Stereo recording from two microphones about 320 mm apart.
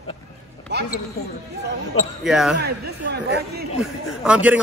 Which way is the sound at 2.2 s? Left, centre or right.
Centre.